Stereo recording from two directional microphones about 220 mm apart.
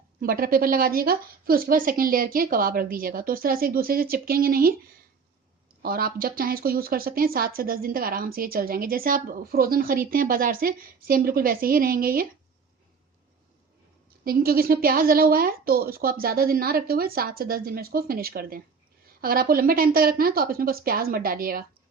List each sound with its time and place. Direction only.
0.2 s speech: 40° right (ahead or behind)
5.8 s speech: 45° right (ahead or behind)
14.3 s a woman's voice: 45° right (ahead or behind)